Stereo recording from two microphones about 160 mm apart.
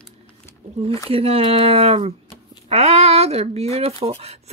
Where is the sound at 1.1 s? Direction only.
35° right (ahead or behind).